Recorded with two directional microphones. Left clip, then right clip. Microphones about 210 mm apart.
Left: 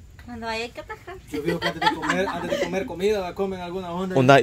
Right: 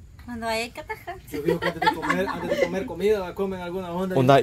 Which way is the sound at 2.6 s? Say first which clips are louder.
Right 2 dB; 25° left (ahead or behind).